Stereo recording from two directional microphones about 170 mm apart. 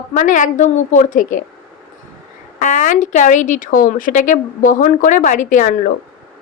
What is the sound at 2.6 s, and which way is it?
Speech, 50° left (ahead or behind).